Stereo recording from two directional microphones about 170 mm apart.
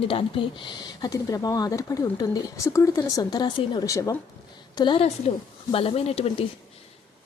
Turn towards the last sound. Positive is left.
turn(degrees=35)  # may be behind; listen again after turning